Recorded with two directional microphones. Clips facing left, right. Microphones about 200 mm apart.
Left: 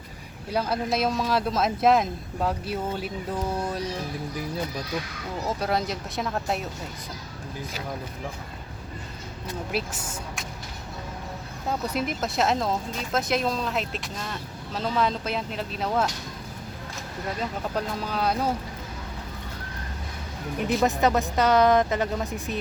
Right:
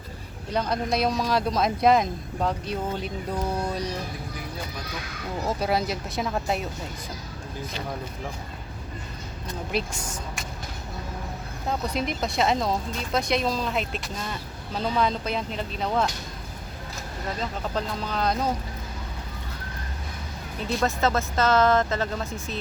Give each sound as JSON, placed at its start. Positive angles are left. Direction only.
{"t": 0.5, "sound": "speech", "side_deg": 5}
{"t": 5.5, "sound": "speech", "side_deg": 0}
{"t": 9.7, "sound": "speech", "side_deg": 5}
{"t": 11.7, "sound": "speech", "side_deg": 5}
{"t": 17.4, "sound": "speech", "side_deg": 10}
{"t": 20.8, "sound": "speech", "side_deg": 15}